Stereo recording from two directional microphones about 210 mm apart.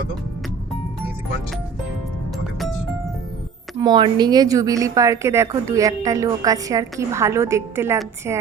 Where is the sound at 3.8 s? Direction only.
20° right (ahead or behind).